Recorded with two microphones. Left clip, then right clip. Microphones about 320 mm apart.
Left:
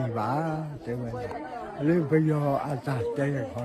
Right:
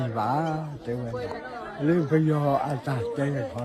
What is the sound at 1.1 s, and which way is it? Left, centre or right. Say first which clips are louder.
Speech: right 1 dB; left.